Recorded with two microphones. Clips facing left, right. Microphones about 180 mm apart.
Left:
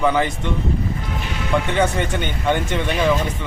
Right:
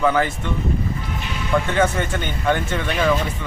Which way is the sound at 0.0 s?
15° left (ahead or behind).